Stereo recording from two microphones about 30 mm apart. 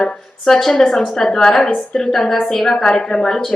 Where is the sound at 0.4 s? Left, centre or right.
Centre.